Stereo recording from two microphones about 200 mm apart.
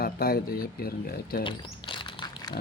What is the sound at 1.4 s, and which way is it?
Crumpling, 25° left (ahead or behind).